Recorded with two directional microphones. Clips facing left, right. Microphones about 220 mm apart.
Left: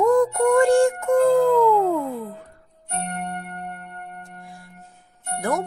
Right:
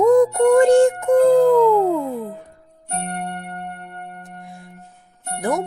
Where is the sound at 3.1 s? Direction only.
35° right (ahead or behind).